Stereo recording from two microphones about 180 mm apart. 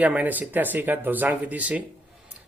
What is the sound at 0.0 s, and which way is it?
Speech, 10° right (ahead or behind).